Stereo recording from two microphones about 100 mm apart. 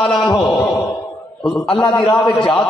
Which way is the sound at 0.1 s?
50° left (ahead or behind).